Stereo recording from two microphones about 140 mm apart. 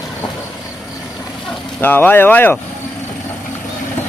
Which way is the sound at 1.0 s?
20° left (ahead or behind).